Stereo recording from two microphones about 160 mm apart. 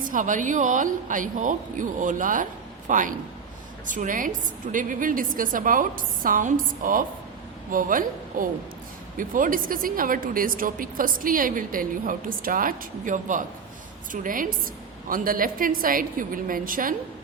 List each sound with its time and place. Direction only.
0.0 s a woman's voice: 55° right (ahead or behind)